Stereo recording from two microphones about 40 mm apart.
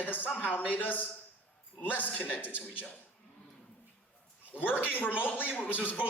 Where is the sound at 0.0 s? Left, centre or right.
Left.